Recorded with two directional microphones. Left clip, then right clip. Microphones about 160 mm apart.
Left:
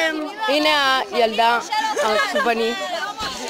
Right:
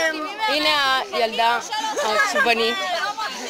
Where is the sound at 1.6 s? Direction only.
10° right (ahead or behind).